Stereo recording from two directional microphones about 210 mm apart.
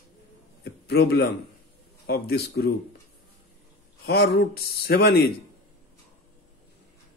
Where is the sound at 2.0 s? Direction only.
50° left (ahead or behind).